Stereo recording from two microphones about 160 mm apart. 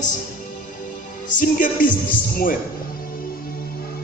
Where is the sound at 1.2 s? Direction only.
55° left (ahead or behind).